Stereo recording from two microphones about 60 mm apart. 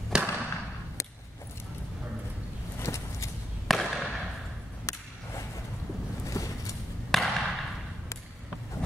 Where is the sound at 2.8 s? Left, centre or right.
Left.